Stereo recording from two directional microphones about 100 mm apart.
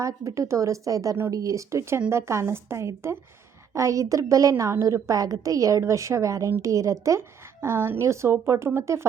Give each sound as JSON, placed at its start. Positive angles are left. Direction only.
{"t": 0.0, "sound": "a woman's voice", "side_deg": -30}